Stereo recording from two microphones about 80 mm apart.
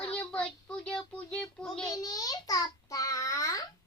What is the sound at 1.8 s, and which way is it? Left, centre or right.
Child singing, left.